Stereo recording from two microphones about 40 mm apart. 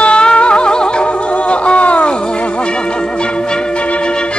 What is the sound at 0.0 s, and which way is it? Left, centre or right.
Music, left.